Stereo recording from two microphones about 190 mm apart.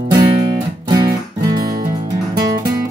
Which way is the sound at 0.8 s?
20° right (ahead or behind).